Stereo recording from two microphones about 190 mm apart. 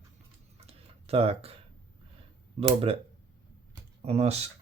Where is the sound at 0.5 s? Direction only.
30° right (ahead or behind).